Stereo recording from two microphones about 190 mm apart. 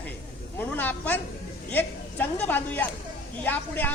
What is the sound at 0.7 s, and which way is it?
A woman's voice, 10° left (ahead or behind).